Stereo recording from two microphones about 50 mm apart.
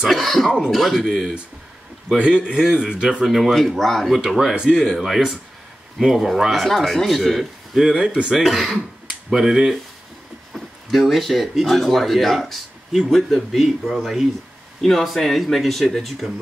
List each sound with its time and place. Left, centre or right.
0.1 s a sound: centre
0.7 s speech: centre
2.1 s a man's voice: centre
3.1 s speech: centre
8.3 s speech: centre